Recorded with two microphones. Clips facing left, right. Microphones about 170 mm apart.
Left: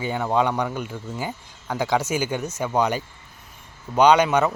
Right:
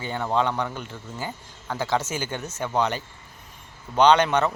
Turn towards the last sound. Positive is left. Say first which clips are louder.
# left 2 dB
turn(degrees=10)  # may be behind; listen again after turning